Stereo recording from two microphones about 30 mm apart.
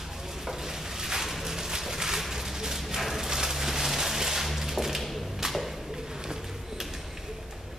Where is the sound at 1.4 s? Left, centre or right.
Centre.